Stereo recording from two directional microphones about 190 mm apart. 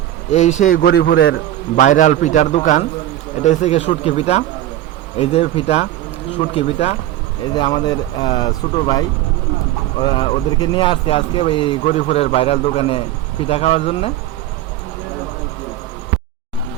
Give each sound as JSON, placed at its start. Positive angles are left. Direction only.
{"t": 0.3, "sound": "a man's voice", "side_deg": 35}
{"t": 1.7, "sound": "a man's voice", "side_deg": 40}
{"t": 7.5, "sound": "a man's voice", "side_deg": 20}